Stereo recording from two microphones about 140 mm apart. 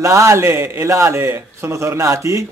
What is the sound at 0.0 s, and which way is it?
A man's voice, 20° right (ahead or behind).